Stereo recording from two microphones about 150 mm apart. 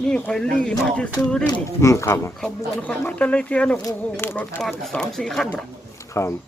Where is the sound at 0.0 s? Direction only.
5° left (ahead or behind).